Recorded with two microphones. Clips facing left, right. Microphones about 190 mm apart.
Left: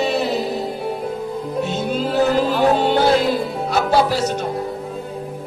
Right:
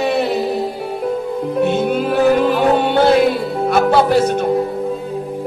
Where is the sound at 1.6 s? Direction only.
55° right (ahead or behind).